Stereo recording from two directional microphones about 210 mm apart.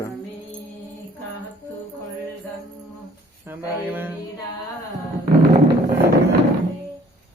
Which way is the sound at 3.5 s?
10° right (ahead or behind).